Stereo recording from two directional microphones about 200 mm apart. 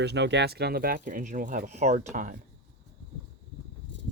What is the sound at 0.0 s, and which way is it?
Speech, 60° right (ahead or behind).